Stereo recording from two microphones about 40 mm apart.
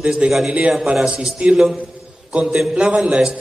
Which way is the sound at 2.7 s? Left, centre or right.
Right.